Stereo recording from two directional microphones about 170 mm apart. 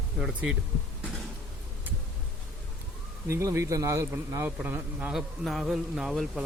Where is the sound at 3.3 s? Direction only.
15° right (ahead or behind).